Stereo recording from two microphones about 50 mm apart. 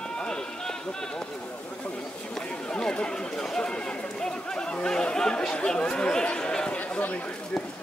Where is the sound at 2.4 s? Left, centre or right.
Centre.